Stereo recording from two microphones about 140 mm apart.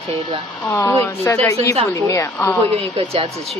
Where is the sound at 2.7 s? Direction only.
40° right (ahead or behind).